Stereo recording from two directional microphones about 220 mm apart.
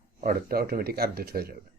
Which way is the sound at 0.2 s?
40° right (ahead or behind).